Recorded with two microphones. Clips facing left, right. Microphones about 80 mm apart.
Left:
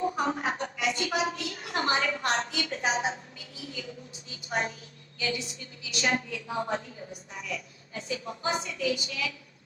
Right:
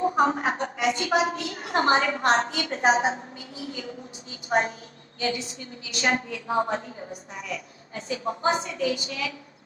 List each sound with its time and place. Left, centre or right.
0.0 s a woman's voice: right